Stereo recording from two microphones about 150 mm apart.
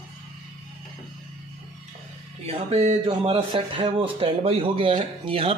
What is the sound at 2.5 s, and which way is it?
Speech, 45° right (ahead or behind).